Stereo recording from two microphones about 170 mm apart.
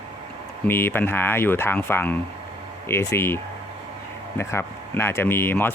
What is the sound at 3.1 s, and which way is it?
Speech, 15° left (ahead or behind).